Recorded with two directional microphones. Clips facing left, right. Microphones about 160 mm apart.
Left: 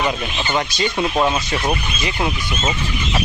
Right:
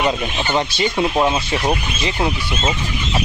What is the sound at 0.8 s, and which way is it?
Speech, 10° right (ahead or behind).